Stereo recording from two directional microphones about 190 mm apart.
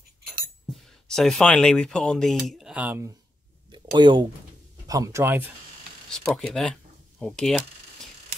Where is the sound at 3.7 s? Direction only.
25° right (ahead or behind).